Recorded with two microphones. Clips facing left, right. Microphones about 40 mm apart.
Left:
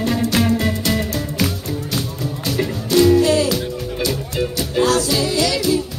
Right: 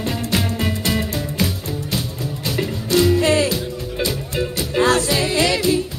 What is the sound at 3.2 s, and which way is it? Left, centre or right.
Music, right.